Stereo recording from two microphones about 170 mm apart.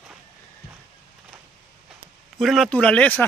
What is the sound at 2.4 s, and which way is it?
Speech, centre (ahead or behind).